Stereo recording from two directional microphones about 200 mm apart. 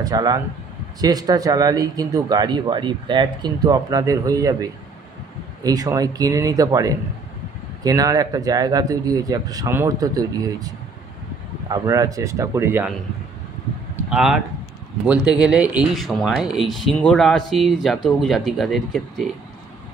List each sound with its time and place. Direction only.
0.0 s speech: 20° right (ahead or behind)
11.7 s speech: 20° right (ahead or behind)
14.1 s speech: 5° right (ahead or behind)